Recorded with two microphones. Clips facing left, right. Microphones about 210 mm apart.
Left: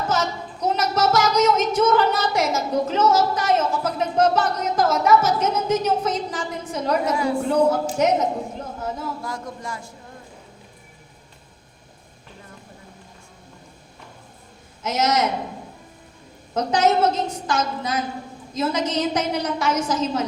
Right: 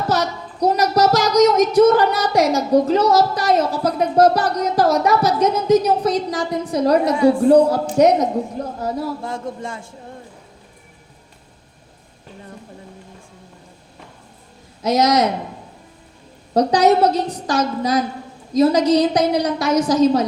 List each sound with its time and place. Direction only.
0.1 s speech: 35° right (ahead or behind)
14.8 s speech: 35° right (ahead or behind)
16.6 s speech: 35° right (ahead or behind)